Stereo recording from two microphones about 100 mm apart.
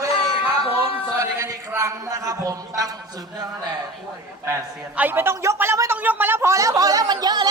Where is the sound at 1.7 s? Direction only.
30° right (ahead or behind).